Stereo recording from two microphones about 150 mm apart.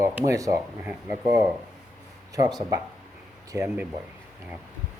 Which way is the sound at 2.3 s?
25° right (ahead or behind).